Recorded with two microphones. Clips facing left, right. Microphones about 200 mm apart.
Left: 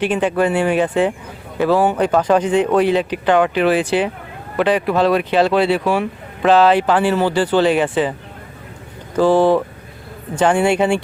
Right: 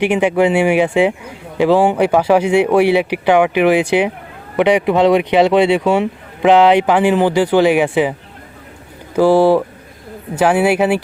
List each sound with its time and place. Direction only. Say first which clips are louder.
0.0 s speech: right 3 dB; 10° right (ahead or behind)
9.1 s speech: right 2 dB; 10° right (ahead or behind)